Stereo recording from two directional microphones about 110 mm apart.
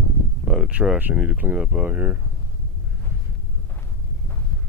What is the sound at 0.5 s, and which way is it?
Speech, 10° right (ahead or behind).